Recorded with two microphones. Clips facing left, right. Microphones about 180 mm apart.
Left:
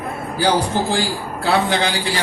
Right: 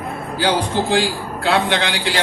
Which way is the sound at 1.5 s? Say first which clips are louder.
Left 1 dB; 75° right (ahead or behind).